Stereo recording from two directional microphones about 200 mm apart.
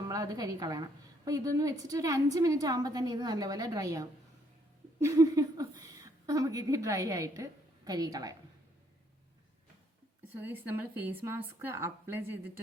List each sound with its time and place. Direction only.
0.1 s a woman's voice: 15° right (ahead or behind)
10.3 s a woman's voice: 10° right (ahead or behind)